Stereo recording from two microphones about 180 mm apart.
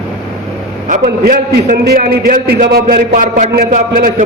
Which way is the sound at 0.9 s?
45° right (ahead or behind).